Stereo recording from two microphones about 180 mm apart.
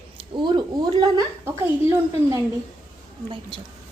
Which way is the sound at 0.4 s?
25° right (ahead or behind).